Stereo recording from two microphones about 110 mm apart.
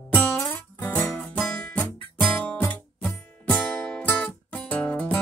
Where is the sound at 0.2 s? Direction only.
20° left (ahead or behind).